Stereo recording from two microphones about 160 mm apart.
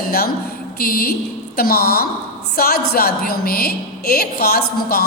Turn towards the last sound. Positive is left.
turn(degrees=75)  # may be behind; listen again after turning